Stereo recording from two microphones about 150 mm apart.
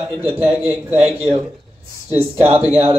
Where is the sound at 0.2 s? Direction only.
15° right (ahead or behind).